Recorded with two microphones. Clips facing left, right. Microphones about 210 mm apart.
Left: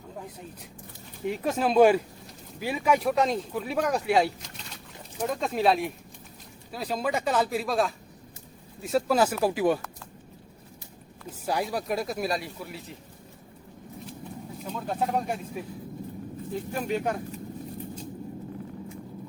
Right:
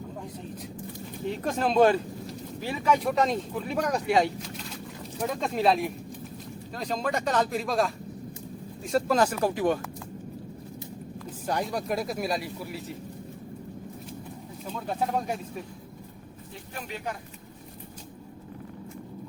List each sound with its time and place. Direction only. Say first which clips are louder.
1.3 s speech: left 1 dB; 5° left (ahead or behind)
11.4 s speech: left 1 dB; 5° left (ahead or behind)
14.7 s speech: left 1 dB; centre (ahead or behind)
16.8 s speech: left 7 dB; 50° left (ahead or behind)